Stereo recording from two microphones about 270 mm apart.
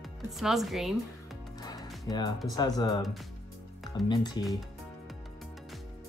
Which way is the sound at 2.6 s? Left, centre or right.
Centre.